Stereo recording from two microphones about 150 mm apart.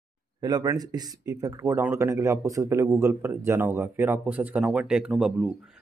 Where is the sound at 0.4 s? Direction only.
25° right (ahead or behind).